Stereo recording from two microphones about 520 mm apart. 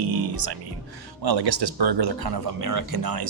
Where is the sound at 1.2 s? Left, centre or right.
Right.